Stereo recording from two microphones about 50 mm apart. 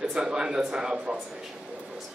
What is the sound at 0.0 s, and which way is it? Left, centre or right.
A man's voice, centre.